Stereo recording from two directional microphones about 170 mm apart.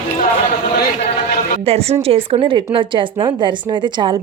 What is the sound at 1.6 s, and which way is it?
A woman's voice, 35° right (ahead or behind).